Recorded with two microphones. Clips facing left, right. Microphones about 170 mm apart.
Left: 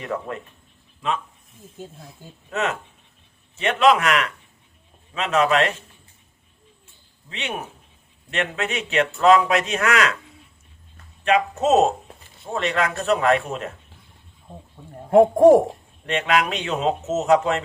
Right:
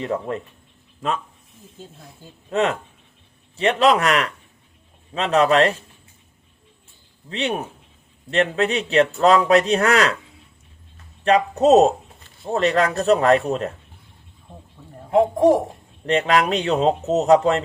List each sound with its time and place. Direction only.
0.0 s speech: 25° right (ahead or behind)
1.0 s speech: 45° right (ahead or behind)
2.5 s a man's voice: 35° right (ahead or behind)
7.3 s a man's voice: 35° right (ahead or behind)
11.2 s a man's voice: 35° right (ahead or behind)
15.1 s speech: 50° left (ahead or behind)
16.0 s a man's voice: 35° right (ahead or behind)